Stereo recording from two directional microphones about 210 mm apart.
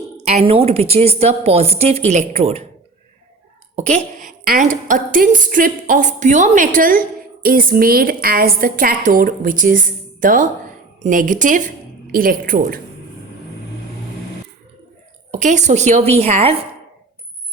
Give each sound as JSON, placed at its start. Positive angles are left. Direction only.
{"t": 0.3, "sound": "speech", "side_deg": -30}
{"t": 3.8, "sound": "a woman's voice", "side_deg": -30}
{"t": 15.3, "sound": "a woman's voice", "side_deg": -35}